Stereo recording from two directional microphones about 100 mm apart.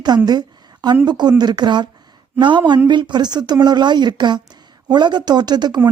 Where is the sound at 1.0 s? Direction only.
45° right (ahead or behind).